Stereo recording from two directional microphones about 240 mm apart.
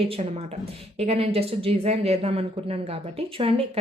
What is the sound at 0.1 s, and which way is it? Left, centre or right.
Speech, right.